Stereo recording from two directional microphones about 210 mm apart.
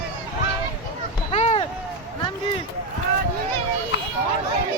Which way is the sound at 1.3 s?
30° left (ahead or behind).